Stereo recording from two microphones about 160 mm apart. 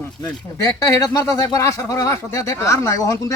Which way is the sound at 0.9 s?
20° left (ahead or behind).